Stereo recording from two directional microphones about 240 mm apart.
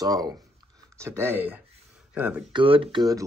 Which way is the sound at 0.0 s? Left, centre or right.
Centre.